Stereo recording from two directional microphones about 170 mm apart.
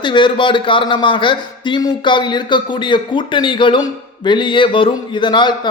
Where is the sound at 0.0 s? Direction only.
30° left (ahead or behind).